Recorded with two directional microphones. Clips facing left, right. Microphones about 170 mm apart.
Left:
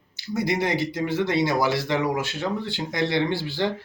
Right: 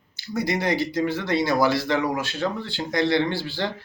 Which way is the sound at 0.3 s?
20° left (ahead or behind).